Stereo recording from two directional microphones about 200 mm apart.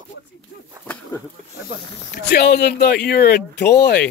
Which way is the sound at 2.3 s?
55° left (ahead or behind).